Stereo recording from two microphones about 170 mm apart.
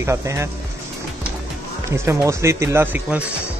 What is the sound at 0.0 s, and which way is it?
Speech, 15° right (ahead or behind).